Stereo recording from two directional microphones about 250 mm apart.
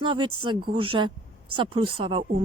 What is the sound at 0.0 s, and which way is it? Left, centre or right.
Speech, centre.